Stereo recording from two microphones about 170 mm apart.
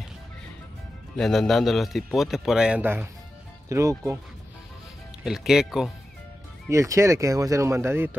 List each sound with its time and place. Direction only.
1.1 s a man's voice: 5° left (ahead or behind); by 3.9 s 20° right (ahead or behind)
5.2 s a man's voice: 5° right (ahead or behind)
6.7 s speech: 15° right (ahead or behind)